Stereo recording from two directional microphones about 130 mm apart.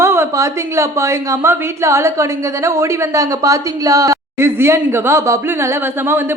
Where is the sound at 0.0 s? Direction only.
20° right (ahead or behind).